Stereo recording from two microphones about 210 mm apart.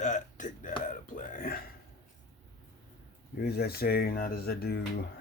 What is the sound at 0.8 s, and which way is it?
Speech, 40° left (ahead or behind).